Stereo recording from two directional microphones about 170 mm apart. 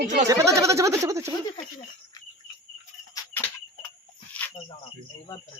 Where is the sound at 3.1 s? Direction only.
10° left (ahead or behind).